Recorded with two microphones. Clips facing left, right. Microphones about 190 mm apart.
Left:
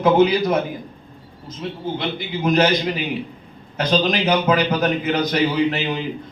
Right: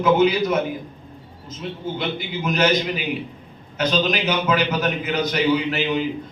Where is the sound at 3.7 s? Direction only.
35° left (ahead or behind).